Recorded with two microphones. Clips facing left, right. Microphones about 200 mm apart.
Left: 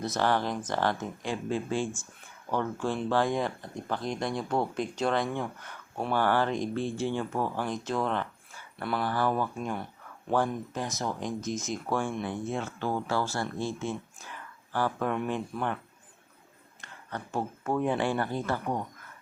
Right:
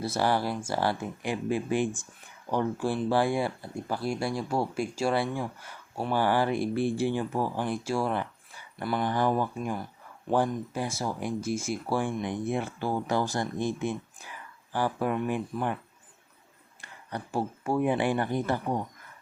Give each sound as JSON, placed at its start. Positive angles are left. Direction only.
{"t": 0.0, "sound": "speech", "side_deg": -10}
{"t": 16.8, "sound": "speech", "side_deg": -10}